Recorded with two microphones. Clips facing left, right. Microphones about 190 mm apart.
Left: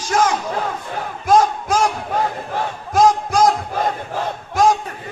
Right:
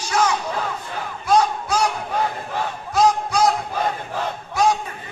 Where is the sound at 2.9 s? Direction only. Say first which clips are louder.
Left 3 dB; 45° left (ahead or behind).